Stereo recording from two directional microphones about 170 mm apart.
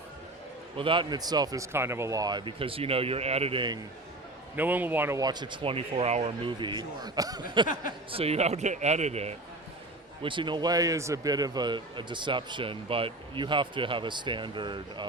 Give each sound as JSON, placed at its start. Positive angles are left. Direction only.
{"t": 0.8, "sound": "speech", "side_deg": -30}
{"t": 4.5, "sound": "a man's voice", "side_deg": -10}
{"t": 10.2, "sound": "speech", "side_deg": -30}